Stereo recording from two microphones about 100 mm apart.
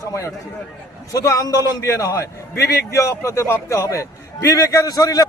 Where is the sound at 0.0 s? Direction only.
30° left (ahead or behind).